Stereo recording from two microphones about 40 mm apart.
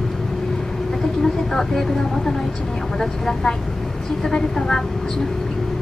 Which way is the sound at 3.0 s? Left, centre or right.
Centre.